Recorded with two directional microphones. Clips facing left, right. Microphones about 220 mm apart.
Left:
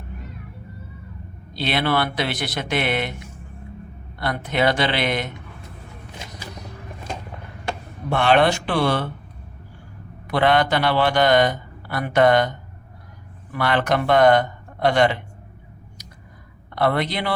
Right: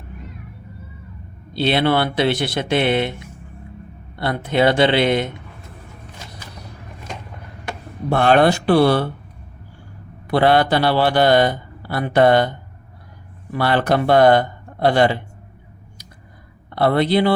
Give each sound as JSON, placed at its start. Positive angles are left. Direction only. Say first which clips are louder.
{"t": 1.5, "sound": "speech", "louder": "right 5 dB", "side_deg": -30}
{"t": 4.2, "sound": "speech", "louder": "right 4 dB", "side_deg": -25}
{"t": 8.1, "sound": "a man's voice", "louder": "right 3 dB", "side_deg": -45}
{"t": 10.2, "sound": "a man's voice", "louder": "right 3 dB", "side_deg": -30}
{"t": 13.5, "sound": "a man's voice", "louder": "right 3 dB", "side_deg": -30}
{"t": 16.7, "sound": "speech", "louder": "right 6 dB", "side_deg": -30}